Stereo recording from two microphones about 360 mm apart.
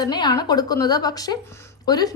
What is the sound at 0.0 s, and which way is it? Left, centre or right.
A woman's voice, centre.